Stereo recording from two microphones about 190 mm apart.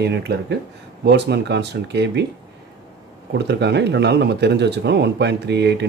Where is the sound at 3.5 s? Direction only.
65° right (ahead or behind).